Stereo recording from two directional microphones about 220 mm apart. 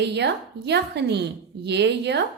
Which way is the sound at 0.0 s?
50° right (ahead or behind).